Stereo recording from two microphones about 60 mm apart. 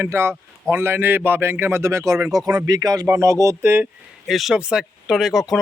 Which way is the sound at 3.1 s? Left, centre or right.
Right.